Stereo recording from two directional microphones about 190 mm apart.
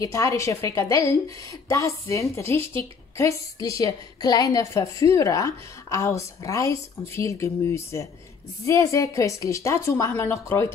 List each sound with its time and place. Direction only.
0.0 s a woman's voice: 15° left (ahead or behind)